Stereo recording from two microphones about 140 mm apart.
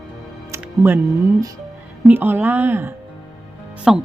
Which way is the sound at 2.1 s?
15° right (ahead or behind).